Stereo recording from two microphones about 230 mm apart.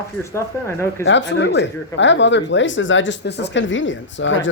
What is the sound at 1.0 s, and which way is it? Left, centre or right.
Speech, left.